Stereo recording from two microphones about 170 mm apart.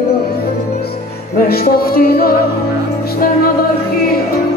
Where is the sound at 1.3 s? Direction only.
65° left (ahead or behind).